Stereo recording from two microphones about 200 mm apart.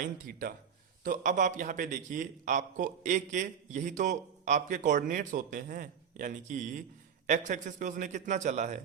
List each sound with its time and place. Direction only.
0.0 s a man's voice: 45° right (ahead or behind)